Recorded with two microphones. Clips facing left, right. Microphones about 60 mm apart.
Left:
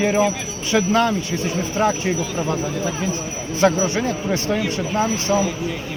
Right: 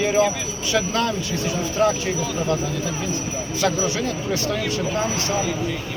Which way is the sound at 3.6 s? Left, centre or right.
Left.